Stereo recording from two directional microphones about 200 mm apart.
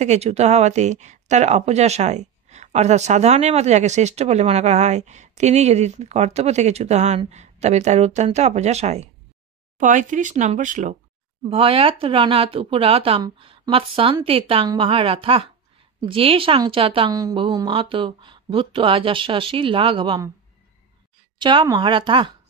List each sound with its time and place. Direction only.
0.0 s speech: 35° right (ahead or behind)
11.5 s a woman's voice: 25° right (ahead or behind)
21.4 s a woman's voice: 25° right (ahead or behind)